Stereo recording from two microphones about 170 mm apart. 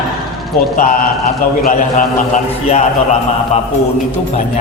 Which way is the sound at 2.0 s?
45° left (ahead or behind).